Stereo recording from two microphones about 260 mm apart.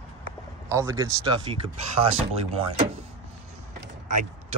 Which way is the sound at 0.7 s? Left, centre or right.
Centre.